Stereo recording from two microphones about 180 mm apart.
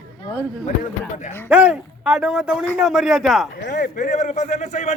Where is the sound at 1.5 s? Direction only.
5° right (ahead or behind).